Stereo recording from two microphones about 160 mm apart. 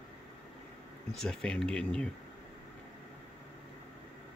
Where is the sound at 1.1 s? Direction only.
5° left (ahead or behind).